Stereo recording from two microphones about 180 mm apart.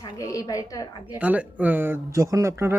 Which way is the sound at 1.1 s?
10° right (ahead or behind).